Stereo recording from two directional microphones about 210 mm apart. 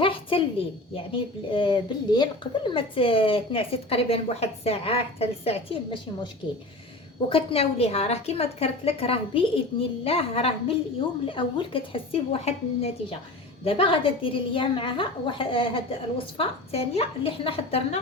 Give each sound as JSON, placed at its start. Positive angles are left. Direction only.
{"t": 0.0, "sound": "a sound", "side_deg": 25}
{"t": 0.9, "sound": "speech", "side_deg": 25}
{"t": 7.3, "sound": "speech", "side_deg": 25}